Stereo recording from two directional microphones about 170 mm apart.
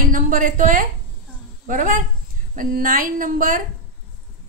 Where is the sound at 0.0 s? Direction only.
50° right (ahead or behind).